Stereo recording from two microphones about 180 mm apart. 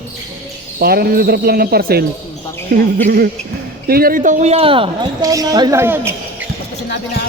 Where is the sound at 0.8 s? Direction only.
55° right (ahead or behind); by 6.4 s 10° right (ahead or behind).